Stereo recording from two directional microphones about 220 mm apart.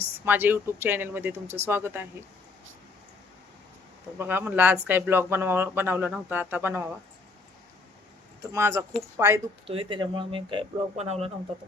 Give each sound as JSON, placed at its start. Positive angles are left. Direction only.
{"t": 0.3, "sound": "speech", "side_deg": -10}
{"t": 4.2, "sound": "speech", "side_deg": -10}
{"t": 8.5, "sound": "speech", "side_deg": -15}
{"t": 9.6, "sound": "speech", "side_deg": -25}